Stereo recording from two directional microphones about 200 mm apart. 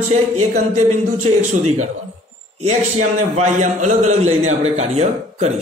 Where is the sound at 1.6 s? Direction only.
35° right (ahead or behind).